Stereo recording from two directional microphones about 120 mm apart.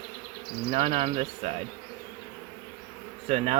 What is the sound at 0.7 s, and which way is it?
Speech, 55° right (ahead or behind).